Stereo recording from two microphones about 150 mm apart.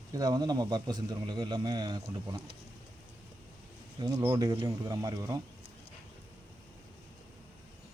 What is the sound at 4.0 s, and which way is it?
Speech, 25° right (ahead or behind).